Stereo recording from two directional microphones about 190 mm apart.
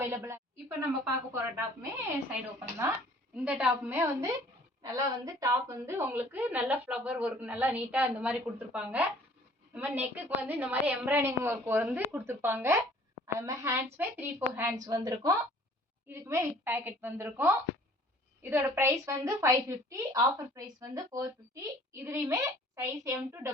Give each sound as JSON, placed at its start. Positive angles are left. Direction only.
{"t": 0.0, "sound": "a woman's voice", "side_deg": -10}